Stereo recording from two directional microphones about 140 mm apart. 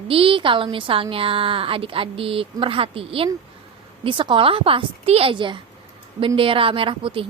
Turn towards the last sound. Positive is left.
turn(degrees=-40)  # may be behind; listen again after turning